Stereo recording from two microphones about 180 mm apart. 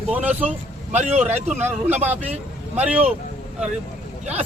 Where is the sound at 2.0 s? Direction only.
35° right (ahead or behind).